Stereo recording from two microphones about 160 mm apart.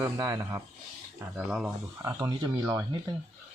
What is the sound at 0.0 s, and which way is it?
Speech, 20° right (ahead or behind).